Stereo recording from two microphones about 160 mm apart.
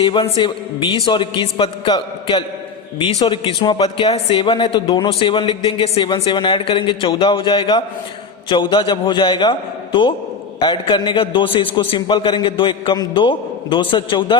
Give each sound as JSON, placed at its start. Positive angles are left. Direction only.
{"t": 0.0, "sound": "a man's voice", "side_deg": 30}